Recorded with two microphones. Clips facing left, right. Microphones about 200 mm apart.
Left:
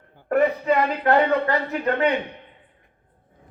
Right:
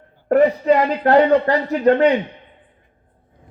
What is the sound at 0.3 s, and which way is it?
A man's voice, 35° right (ahead or behind).